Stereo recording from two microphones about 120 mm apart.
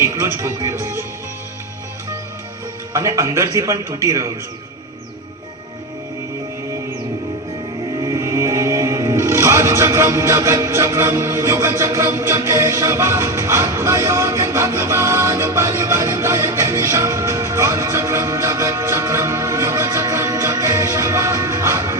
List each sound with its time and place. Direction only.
0.0 s speech: 20° right (ahead or behind)
2.9 s a man's voice: 25° right (ahead or behind)
7.9 s speech: 30° right (ahead or behind)